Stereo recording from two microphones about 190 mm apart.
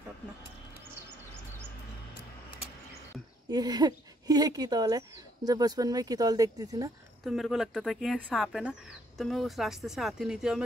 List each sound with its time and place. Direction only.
3.4 s speech: 20° right (ahead or behind)
7.2 s speech: centre (ahead or behind)